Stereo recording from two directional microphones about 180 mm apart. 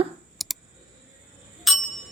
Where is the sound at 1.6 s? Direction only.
Centre (ahead or behind).